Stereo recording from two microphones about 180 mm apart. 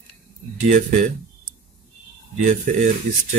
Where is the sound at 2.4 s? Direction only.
45° right (ahead or behind).